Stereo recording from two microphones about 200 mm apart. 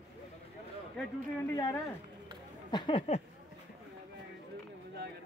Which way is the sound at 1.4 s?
20° left (ahead or behind).